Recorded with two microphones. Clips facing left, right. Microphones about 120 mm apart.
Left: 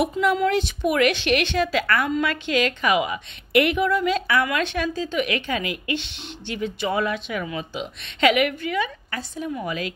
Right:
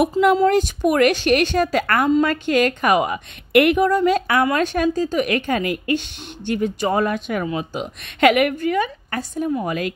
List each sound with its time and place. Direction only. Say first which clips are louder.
0.4 s a woman's voice: right 5 dB; 45° right (ahead or behind)
7.4 s a woman's voice: right 5 dB; 35° right (ahead or behind)
7.8 s speech: right 4 dB; 50° right (ahead or behind)